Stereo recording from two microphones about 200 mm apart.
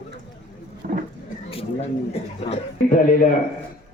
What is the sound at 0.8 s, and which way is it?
Vehicle, 45° right (ahead or behind).